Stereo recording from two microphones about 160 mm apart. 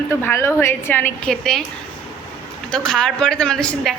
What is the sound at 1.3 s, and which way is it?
Speech, centre (ahead or behind).